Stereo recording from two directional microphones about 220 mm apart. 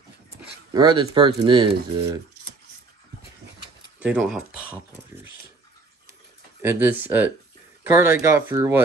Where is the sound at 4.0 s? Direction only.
5° right (ahead or behind).